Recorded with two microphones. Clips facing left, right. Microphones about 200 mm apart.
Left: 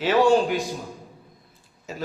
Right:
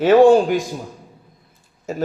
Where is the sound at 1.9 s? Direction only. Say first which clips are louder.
Right 9 dB; 45° right (ahead or behind).